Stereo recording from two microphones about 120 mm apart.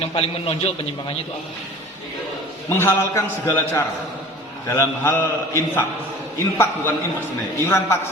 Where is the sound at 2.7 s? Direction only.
20° left (ahead or behind).